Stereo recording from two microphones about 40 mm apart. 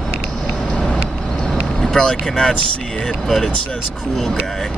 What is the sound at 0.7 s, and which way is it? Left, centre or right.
Vehicle, left.